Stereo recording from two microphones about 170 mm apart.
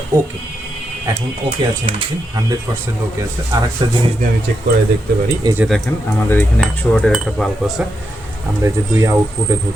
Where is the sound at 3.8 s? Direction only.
25° right (ahead or behind).